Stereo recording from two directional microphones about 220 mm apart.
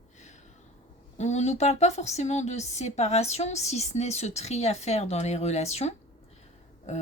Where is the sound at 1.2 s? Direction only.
30° left (ahead or behind).